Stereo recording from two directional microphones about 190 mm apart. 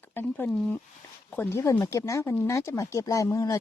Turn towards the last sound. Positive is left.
turn(degrees=20)  # may be behind; listen again after turning